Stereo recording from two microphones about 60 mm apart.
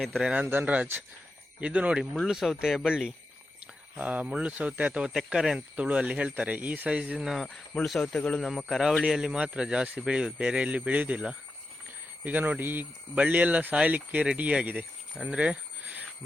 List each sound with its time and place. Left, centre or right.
0.0 s a man's voice: centre
0.4 s speech: right
2.2 s a man's voice: centre
3.6 s speech: right
5.5 s a man's voice: right
7.3 s speech: centre
8.5 s a man's voice: centre